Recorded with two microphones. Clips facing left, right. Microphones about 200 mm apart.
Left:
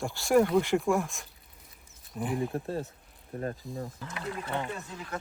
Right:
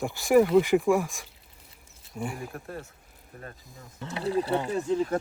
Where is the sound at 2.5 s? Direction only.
30° left (ahead or behind).